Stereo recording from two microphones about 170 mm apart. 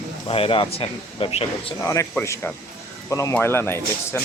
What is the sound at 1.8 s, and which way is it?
Speech, 20° left (ahead or behind).